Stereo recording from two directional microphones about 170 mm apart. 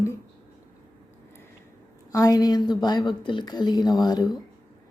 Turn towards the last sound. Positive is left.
turn(degrees=25)  # may be behind; listen again after turning